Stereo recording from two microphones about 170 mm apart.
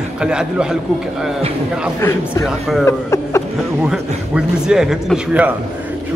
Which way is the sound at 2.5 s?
Centre (ahead or behind).